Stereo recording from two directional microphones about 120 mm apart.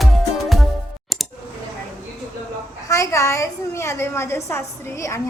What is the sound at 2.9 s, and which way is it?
A woman's voice, 25° left (ahead or behind).